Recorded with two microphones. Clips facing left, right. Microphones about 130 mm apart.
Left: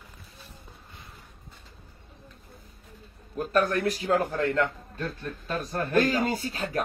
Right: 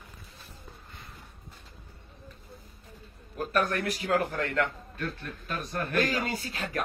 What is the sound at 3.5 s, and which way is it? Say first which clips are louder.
Speech: left 4 dB; 30° left (ahead or behind).